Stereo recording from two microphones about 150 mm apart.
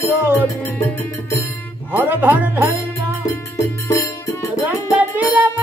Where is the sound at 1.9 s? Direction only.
15° right (ahead or behind).